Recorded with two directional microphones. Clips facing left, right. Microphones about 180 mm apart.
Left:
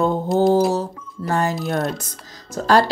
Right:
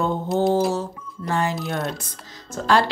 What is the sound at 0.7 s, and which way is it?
Music, 40° left (ahead or behind).